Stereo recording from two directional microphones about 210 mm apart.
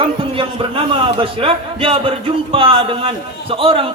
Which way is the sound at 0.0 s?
25° right (ahead or behind).